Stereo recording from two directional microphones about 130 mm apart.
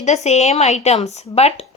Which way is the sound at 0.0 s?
60° left (ahead or behind).